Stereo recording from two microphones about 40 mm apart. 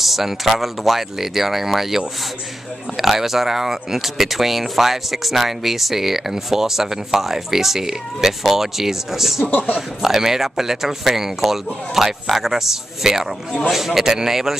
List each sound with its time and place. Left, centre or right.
0.0 s speech: centre
9.5 s speech: left
9.8 s speech: centre